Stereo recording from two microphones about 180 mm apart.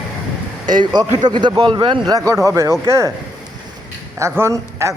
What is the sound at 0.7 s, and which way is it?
Speech, 25° right (ahead or behind).